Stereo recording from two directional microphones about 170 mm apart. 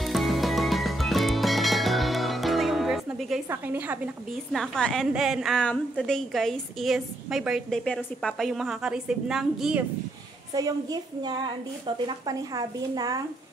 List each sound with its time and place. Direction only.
0.0 s music: centre (ahead or behind)
3.4 s a woman's voice: 10° right (ahead or behind)
10.5 s a woman's voice: 20° right (ahead or behind)